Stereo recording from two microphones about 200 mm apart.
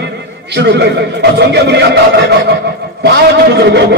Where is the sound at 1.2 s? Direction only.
55° right (ahead or behind).